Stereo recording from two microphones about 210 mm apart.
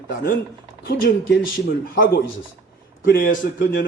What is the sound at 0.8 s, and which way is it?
Speech, 55° left (ahead or behind).